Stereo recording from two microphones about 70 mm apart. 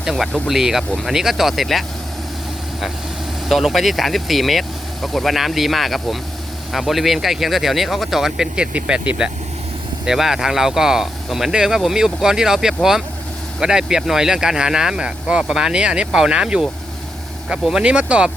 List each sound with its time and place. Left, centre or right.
0.0 s speech: centre
3.5 s speech: centre
17.8 s speech: centre